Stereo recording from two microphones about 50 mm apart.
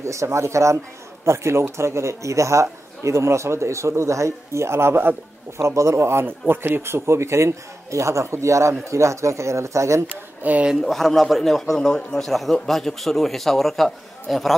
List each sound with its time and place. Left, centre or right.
0.0 s speech: right
1.2 s a man's voice: right
5.6 s a man's voice: right
10.4 s speech: right
10.9 s a man's voice: centre